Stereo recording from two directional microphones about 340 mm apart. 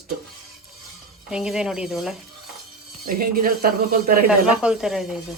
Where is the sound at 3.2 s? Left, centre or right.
Right.